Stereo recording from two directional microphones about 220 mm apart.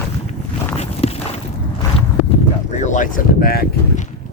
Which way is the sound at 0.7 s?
30° left (ahead or behind).